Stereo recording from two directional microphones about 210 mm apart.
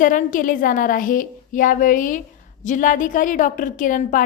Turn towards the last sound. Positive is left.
turn(degrees=40)  # may be behind; listen again after turning